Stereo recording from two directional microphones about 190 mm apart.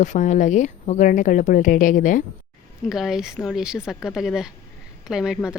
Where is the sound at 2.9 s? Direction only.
Centre (ahead or behind).